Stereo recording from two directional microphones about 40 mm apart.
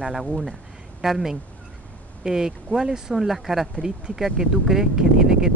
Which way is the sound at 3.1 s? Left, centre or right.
Centre.